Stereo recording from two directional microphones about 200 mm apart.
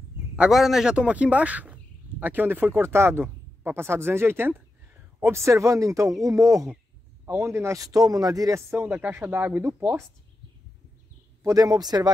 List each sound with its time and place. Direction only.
0.4 s a man's voice: centre (ahead or behind)
11.4 s speech: 20° right (ahead or behind)